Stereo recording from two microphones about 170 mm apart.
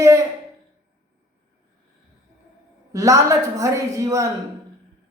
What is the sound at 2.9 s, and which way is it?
A woman's voice, 20° right (ahead or behind).